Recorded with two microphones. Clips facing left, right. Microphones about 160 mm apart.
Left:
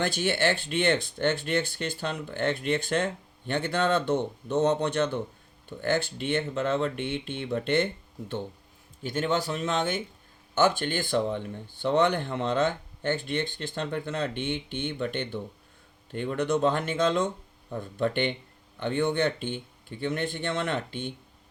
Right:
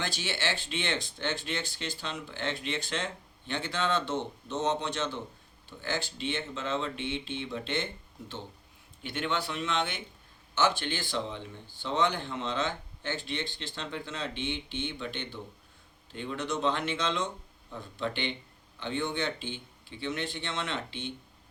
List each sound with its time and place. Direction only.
0.0 s speech: 55° left (ahead or behind)
9.0 s speech: 40° left (ahead or behind)